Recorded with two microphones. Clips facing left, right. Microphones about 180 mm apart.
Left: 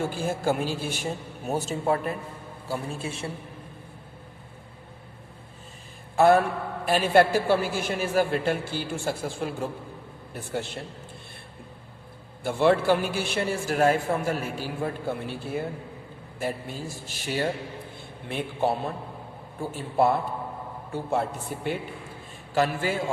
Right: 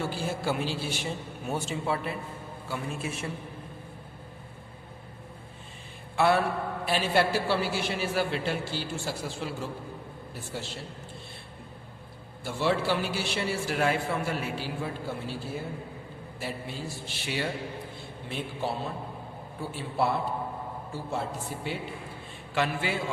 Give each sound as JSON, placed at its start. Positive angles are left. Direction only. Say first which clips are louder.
{"t": 0.0, "sound": "a man's voice", "louder": "left 4 dB", "side_deg": 50}
{"t": 6.1, "sound": "a man's voice", "louder": "left 5 dB", "side_deg": 45}
{"t": 12.4, "sound": "a man's voice", "louder": "left 6 dB", "side_deg": 55}
{"t": 18.3, "sound": "a woman's voice", "louder": "left 6 dB", "side_deg": 55}
{"t": 22.5, "sound": "a man's voice", "louder": "left 4 dB", "side_deg": 40}